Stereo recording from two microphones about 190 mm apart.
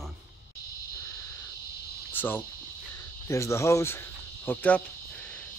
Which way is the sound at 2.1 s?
10° left (ahead or behind).